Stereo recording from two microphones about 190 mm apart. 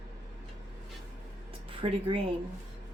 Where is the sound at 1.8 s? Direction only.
25° right (ahead or behind).